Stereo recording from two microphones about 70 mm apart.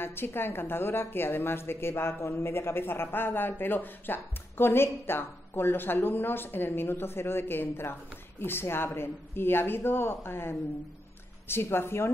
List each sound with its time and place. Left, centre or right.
0.0 s a woman's voice: left